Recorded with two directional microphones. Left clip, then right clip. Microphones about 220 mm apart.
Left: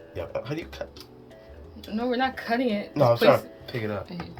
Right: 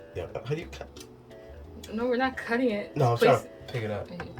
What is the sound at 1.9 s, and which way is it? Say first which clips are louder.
Speech: left 1 dB; 40° left (ahead or behind).